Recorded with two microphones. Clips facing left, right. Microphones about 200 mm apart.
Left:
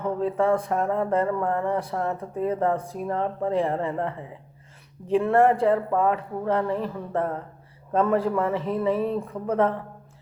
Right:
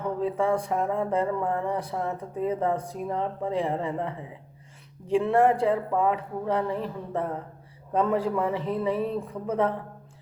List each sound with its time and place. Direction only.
0.2 s speech: 15° right (ahead or behind)